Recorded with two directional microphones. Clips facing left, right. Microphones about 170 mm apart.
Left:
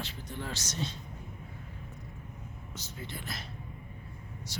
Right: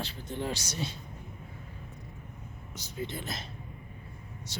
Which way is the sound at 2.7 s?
15° right (ahead or behind).